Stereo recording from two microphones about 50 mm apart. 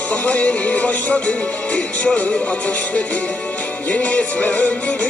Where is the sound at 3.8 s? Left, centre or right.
Left.